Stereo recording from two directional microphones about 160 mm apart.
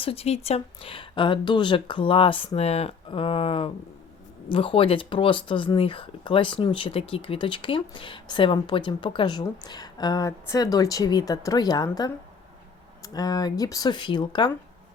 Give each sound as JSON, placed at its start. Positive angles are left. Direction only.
{"t": 0.0, "sound": "speech", "side_deg": 35}